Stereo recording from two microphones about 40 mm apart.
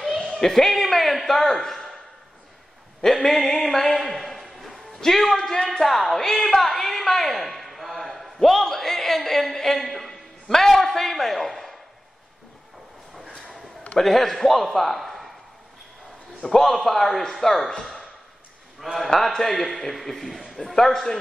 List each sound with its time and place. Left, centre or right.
0.0 s a man's voice: centre
3.0 s a sound: centre
5.0 s a man's voice: centre
13.9 s a man's voice: centre
16.4 s a man's voice: centre
18.8 s a man's voice: centre